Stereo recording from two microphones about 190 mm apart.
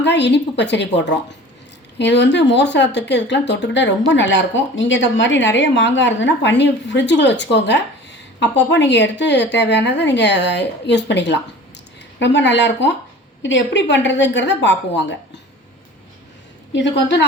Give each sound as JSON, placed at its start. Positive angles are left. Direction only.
{"t": 0.0, "sound": "a woman's voice", "side_deg": 65}